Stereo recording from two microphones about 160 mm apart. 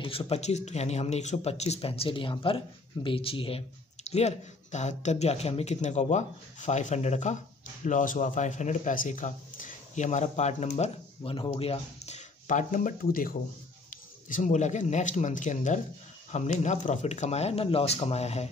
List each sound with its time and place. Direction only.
0.0 s speech: 35° left (ahead or behind)
10.8 s speech: 35° left (ahead or behind); by 13.4 s 65° left (ahead or behind)
14.3 s speech: 50° left (ahead or behind)